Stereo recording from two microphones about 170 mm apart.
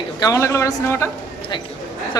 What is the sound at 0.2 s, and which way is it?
Speech, 20° left (ahead or behind).